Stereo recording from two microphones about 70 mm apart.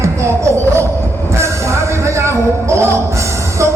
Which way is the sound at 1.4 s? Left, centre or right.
Right.